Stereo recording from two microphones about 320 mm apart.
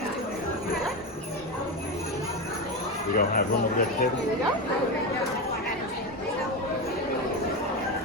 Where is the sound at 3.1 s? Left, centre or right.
Left.